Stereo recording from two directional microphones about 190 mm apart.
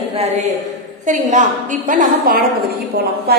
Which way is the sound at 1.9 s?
45° right (ahead or behind).